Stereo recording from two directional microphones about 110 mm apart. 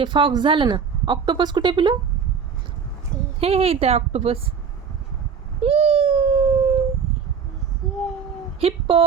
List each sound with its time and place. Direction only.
0.0 s speech: 45° right (ahead or behind)
3.4 s speech: 65° right (ahead or behind)
5.6 s cat: 60° right (ahead or behind)
8.6 s speech: 50° right (ahead or behind)